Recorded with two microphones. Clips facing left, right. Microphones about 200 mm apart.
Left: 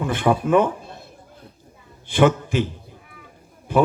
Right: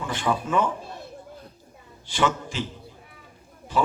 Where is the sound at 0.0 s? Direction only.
55° left (ahead or behind).